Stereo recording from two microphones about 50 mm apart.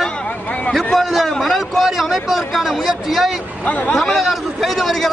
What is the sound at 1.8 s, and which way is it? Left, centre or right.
A man's voice, centre.